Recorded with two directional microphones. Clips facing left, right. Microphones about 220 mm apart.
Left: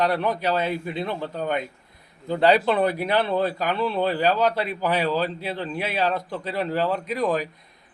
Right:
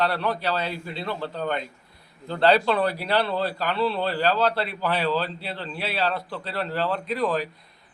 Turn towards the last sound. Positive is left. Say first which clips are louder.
# left 1 dB
turn(degrees=15)  # may be behind; listen again after turning